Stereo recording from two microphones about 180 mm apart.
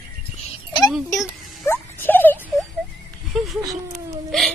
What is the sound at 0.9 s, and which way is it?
Speech, centre (ahead or behind).